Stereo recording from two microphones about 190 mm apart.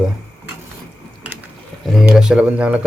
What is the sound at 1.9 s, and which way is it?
Speech, 5° right (ahead or behind).